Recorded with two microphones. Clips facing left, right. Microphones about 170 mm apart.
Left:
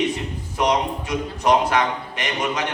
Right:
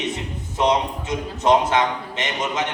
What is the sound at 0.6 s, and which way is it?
A man's voice, 25° right (ahead or behind).